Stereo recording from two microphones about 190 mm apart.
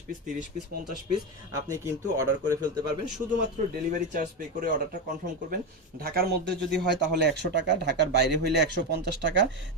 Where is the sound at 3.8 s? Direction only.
45° right (ahead or behind).